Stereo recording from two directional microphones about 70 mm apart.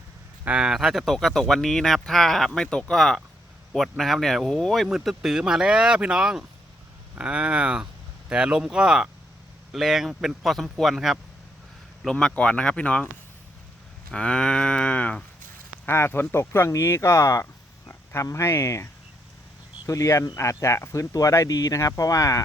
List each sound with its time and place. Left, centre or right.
0.4 s speech: centre
0.7 s speech: centre
2.6 s cattle: centre
3.7 s speech: centre
4.9 s speech: centre
12.2 s cattle: centre
14.1 s cattle: centre
15.9 s speech: left
17.4 s a sound: left
18.2 s speech: left
19.9 s speech: left